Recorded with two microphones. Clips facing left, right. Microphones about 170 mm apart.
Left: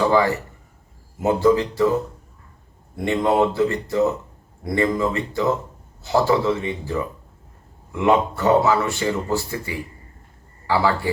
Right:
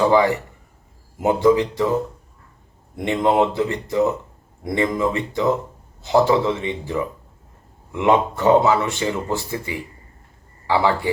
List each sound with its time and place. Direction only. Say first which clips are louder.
0.1 s a man's voice: right 2 dB; 20° right (ahead or behind)
2.9 s speech: right 1 dB; 20° right (ahead or behind)